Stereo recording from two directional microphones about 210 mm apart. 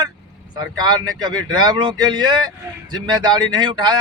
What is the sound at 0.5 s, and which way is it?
Speech, 20° right (ahead or behind).